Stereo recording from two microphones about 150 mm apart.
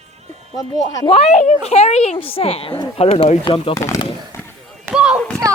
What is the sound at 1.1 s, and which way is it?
A woman's voice, 45° left (ahead or behind).